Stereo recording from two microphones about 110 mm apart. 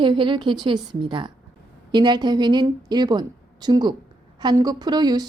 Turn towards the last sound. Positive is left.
turn(degrees=-40)  # may be behind; listen again after turning